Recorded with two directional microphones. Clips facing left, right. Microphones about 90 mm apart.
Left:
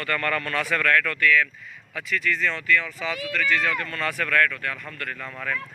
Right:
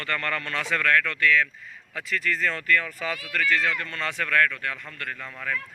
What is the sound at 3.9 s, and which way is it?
Speech, 25° right (ahead or behind).